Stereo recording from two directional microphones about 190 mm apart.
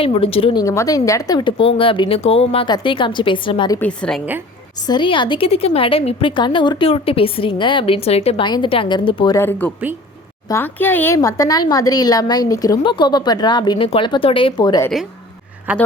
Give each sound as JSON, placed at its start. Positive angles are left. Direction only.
{"t": 0.0, "sound": "a woman's voice", "side_deg": 30}
{"t": 0.6, "sound": "a woman's voice", "side_deg": 15}
{"t": 3.8, "sound": "a woman's voice", "side_deg": 5}
{"t": 4.9, "sound": "a woman's voice", "side_deg": 25}
{"t": 15.7, "sound": "speech", "side_deg": -5}